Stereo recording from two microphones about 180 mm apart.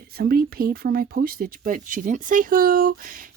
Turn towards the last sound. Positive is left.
turn(degrees=-50)  # may be behind; listen again after turning